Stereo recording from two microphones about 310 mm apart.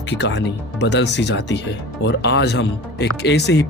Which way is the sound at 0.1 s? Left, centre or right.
Left.